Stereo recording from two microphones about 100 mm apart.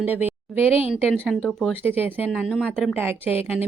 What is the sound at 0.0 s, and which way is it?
Speech, 20° right (ahead or behind).